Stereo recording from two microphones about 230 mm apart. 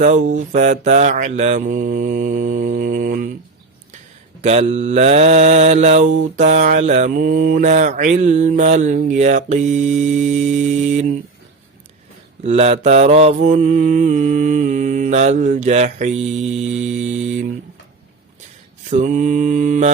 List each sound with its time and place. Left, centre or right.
0.0 s mantra: right
4.4 s mantra: right
12.4 s mantra: right
18.9 s mantra: right